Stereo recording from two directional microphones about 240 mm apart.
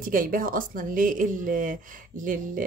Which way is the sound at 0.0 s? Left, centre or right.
Right.